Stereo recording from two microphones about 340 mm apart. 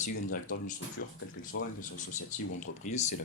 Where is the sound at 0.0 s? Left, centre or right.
Left.